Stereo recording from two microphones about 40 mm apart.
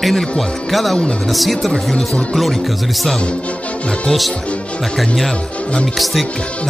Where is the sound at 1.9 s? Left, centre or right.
Centre.